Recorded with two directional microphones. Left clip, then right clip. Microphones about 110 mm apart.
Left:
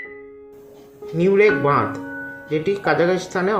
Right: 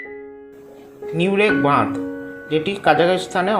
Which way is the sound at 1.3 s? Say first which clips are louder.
Left 1 dB; 25° right (ahead or behind).